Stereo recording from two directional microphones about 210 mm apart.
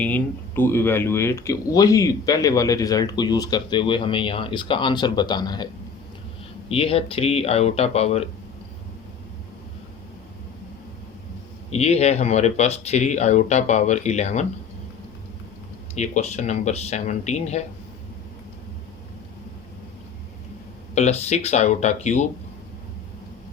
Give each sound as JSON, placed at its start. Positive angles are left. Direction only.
{"t": 0.0, "sound": "speech", "side_deg": 10}
{"t": 6.7, "sound": "speech", "side_deg": 25}
{"t": 11.7, "sound": "speech", "side_deg": 30}
{"t": 16.0, "sound": "speech", "side_deg": 30}
{"t": 20.9, "sound": "speech", "side_deg": 30}